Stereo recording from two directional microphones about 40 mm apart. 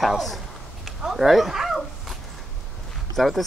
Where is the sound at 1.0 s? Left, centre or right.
Centre.